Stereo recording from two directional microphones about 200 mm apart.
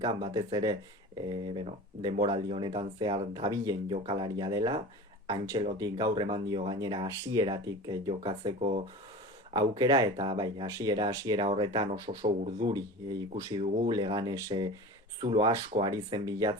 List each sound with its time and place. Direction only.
0.0 s speech: 20° right (ahead or behind)